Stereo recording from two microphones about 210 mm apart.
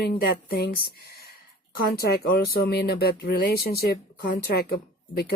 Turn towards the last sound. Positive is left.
turn(degrees=45)  # may be behind; listen again after turning